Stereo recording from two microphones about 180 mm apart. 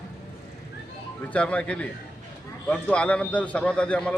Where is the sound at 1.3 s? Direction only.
5° left (ahead or behind).